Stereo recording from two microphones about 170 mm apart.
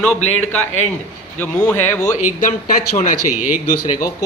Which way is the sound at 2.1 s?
45° left (ahead or behind).